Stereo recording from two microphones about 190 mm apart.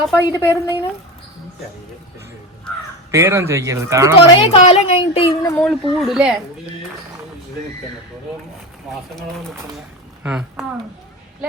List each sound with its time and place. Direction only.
0.1 s speech: 20° left (ahead or behind)
3.1 s speech: 15° right (ahead or behind)
4.4 s speech: 30° left (ahead or behind)
5.5 s speech: centre (ahead or behind)
10.2 s speech: 5° right (ahead or behind)